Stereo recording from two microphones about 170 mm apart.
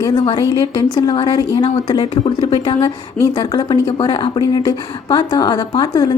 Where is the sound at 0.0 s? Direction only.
25° left (ahead or behind).